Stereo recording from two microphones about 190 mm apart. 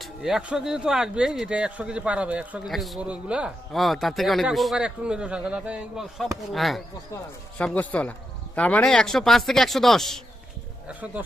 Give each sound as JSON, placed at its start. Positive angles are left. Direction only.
{"t": 0.0, "sound": "speech", "side_deg": 0}